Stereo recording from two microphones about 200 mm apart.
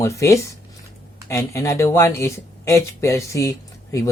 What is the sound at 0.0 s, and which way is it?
Speech, 15° left (ahead or behind).